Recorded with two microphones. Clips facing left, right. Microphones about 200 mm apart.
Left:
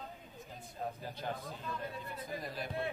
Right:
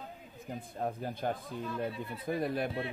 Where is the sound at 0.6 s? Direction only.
50° right (ahead or behind).